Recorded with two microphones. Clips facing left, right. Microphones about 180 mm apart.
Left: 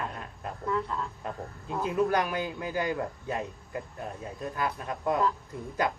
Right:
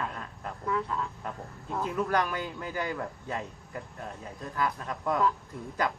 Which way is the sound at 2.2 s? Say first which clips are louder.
Left 1 dB; 15° left (ahead or behind).